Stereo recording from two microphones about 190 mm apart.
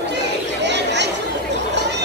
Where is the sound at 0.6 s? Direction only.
65° right (ahead or behind).